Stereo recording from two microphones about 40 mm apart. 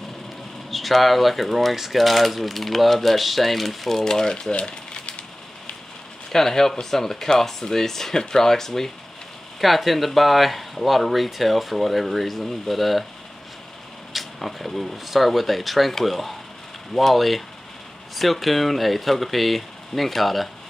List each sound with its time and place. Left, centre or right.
0.7 s speech: centre
4.0 s speech: centre
4.5 s rattle: left
6.3 s speech: centre
9.6 s speech: centre
14.1 s speech: centre